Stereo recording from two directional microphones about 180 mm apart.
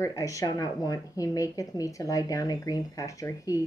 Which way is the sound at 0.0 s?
15° left (ahead or behind).